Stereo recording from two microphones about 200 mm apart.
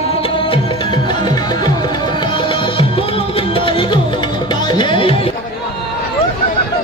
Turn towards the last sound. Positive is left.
turn(degrees=25)  # may be behind; listen again after turning